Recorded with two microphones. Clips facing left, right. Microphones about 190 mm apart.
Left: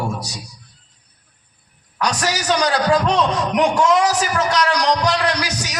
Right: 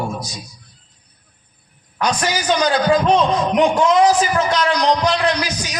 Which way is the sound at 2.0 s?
75° left (ahead or behind).